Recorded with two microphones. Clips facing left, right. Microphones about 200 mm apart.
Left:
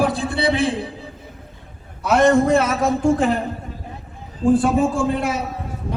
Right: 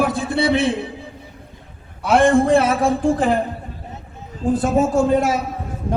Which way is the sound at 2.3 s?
30° right (ahead or behind).